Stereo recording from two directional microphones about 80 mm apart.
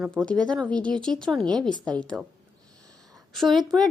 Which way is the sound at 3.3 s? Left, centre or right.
Centre.